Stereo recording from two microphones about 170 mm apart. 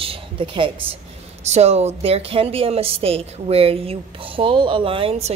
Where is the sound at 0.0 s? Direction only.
30° right (ahead or behind).